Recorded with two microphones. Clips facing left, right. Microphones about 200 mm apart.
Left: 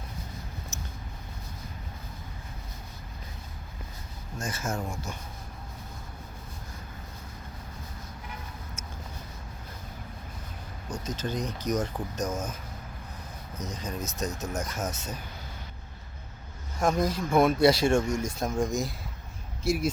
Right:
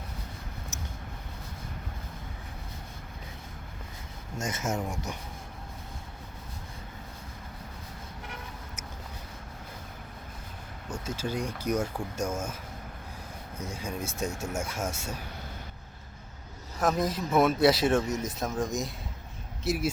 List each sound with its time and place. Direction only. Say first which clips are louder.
4.4 s speech: right 1 dB; 20° right (ahead or behind)
11.0 s speech: even; 10° right (ahead or behind)
13.7 s speech: even; 10° right (ahead or behind)
16.8 s speech: left 1 dB; centre (ahead or behind)